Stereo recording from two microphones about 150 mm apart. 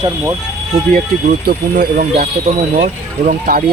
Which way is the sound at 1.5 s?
60° right (ahead or behind).